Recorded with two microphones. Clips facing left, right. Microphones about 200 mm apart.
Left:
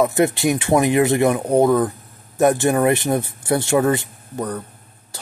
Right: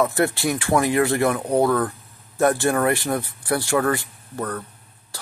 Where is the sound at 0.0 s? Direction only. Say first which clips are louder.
Left 4 dB; 20° left (ahead or behind).